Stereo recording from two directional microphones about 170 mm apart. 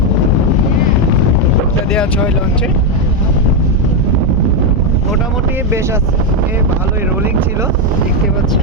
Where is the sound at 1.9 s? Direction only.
5° left (ahead or behind).